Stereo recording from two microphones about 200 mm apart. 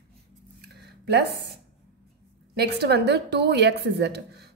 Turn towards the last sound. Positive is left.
turn(degrees=-55)  # may be behind; listen again after turning